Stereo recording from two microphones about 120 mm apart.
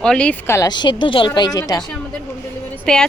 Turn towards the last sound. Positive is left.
turn(degrees=5)  # may be behind; listen again after turning